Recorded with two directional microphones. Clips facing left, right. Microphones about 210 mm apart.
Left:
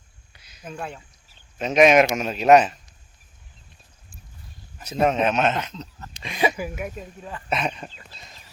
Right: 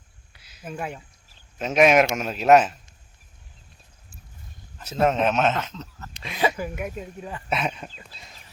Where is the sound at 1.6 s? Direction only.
5° right (ahead or behind).